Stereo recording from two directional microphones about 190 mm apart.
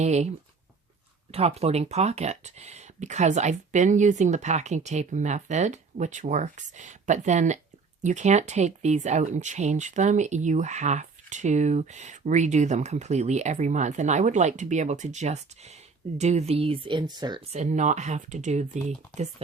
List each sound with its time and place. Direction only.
0.0 s speech: 35° right (ahead or behind)